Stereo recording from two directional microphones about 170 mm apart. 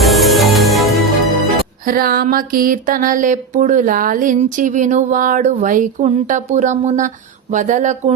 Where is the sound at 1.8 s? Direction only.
60° right (ahead or behind).